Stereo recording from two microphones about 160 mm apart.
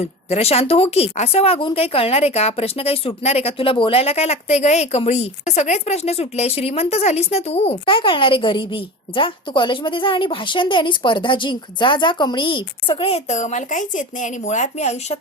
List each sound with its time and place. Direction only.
0.0 s speech: 40° left (ahead or behind)